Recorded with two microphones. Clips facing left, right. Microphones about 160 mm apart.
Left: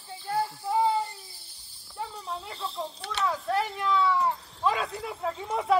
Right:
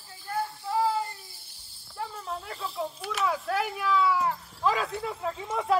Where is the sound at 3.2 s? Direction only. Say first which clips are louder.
Left 1 dB; 5° right (ahead or behind).